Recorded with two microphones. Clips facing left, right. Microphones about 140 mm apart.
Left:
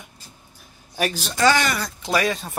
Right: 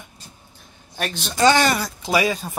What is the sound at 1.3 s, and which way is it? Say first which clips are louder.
Speech: right 3 dB; 25° right (ahead or behind).